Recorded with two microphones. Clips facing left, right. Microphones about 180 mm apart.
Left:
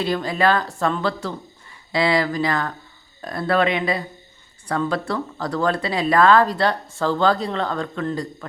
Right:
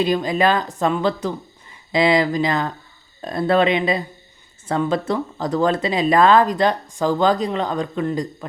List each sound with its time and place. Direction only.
0.0 s speech: 15° right (ahead or behind)